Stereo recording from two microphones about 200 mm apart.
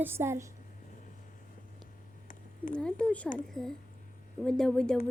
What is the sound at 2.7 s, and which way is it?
A woman's voice, 5° left (ahead or behind).